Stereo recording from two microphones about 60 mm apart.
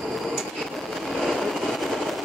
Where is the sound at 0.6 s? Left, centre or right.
Centre.